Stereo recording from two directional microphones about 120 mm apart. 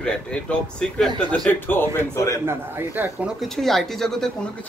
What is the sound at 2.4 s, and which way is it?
Speech, 20° right (ahead or behind).